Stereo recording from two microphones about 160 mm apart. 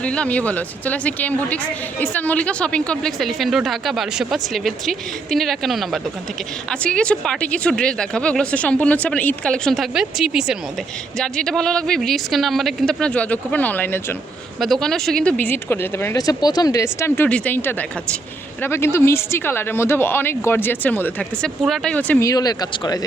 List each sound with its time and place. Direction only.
0.0 s a woman's voice: 5° left (ahead or behind)
14.6 s speech: centre (ahead or behind)
22.3 s speech: 25° left (ahead or behind)